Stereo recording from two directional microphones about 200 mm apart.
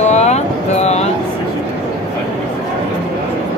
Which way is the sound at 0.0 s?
35° left (ahead or behind).